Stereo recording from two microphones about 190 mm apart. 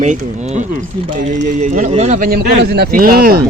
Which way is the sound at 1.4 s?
40° right (ahead or behind).